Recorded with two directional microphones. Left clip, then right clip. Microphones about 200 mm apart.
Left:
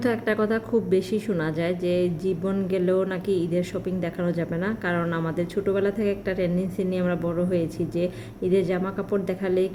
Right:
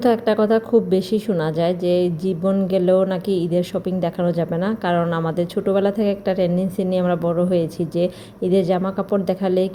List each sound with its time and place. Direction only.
0.0 s speech: 15° right (ahead or behind)